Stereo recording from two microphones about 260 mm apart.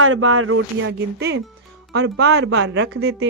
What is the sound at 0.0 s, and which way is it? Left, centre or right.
A woman's voice, right.